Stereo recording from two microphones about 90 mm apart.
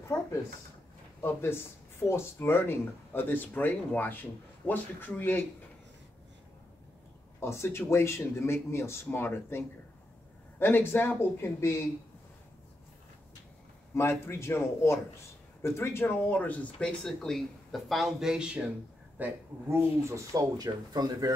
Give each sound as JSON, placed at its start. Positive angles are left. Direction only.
{"t": 1.2, "sound": "speech", "side_deg": 25}
{"t": 7.3, "sound": "speech", "side_deg": 30}
{"t": 13.9, "sound": "speech", "side_deg": 30}
{"t": 19.1, "sound": "speech", "side_deg": -20}
{"t": 20.1, "sound": "speech", "side_deg": -35}